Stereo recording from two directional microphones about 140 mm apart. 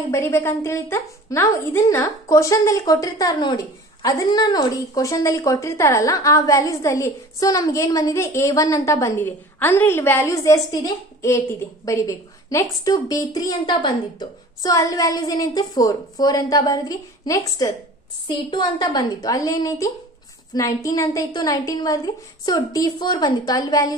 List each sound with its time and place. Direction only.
0.1 s a woman's voice: 20° left (ahead or behind)